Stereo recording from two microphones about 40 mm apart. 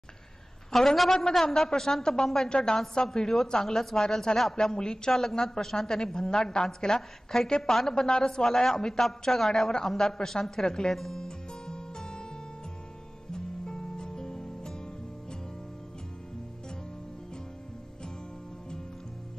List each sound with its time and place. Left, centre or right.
0.7 s a woman's voice: centre
10.5 s music: centre
13.3 s music: centre